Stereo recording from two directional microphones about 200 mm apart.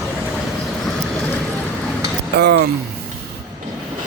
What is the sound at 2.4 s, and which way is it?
Speech, 55° right (ahead or behind).